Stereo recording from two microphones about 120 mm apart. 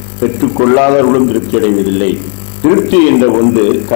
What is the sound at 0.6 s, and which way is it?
Speech, 20° left (ahead or behind).